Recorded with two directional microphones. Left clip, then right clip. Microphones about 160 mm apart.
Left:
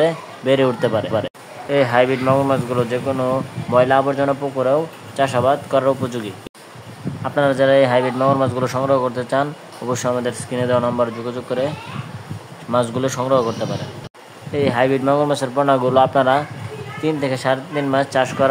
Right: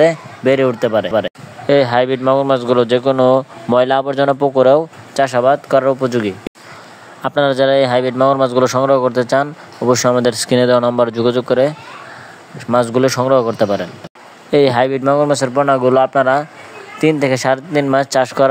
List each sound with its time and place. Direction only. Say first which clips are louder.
0.0 s speech: right 6 dB; 30° right (ahead or behind)
1.7 s speech: right 3 dB; 50° right (ahead or behind)
5.1 s speech: right 4 dB; 40° right (ahead or behind)
7.2 s speech: right 3 dB; 60° right (ahead or behind)
10.5 s speech: right 6 dB; 60° right (ahead or behind)
12.7 s speech: right 6 dB; 45° right (ahead or behind)
14.5 s speech: right 6 dB; 60° right (ahead or behind)
14.9 s speech: right 3 dB; 35° right (ahead or behind)
17.0 s speech: right 6 dB; 45° right (ahead or behind)